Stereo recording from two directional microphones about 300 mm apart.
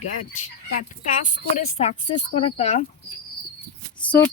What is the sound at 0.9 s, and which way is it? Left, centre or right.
Speech, left.